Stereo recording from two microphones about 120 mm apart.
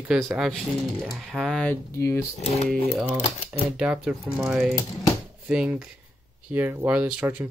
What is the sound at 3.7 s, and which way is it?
Speech, 10° right (ahead or behind).